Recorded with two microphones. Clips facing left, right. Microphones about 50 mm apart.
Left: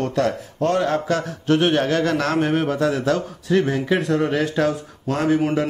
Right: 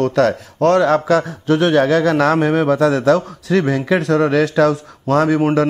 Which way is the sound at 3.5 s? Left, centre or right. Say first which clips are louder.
Right 3 dB; right.